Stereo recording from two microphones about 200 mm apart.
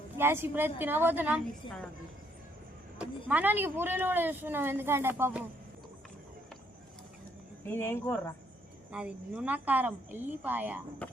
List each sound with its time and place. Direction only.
0.2 s speech: 10° right (ahead or behind)
3.0 s speech: 10° right (ahead or behind)
7.7 s speech: 10° left (ahead or behind)
8.9 s speech: 5° right (ahead or behind)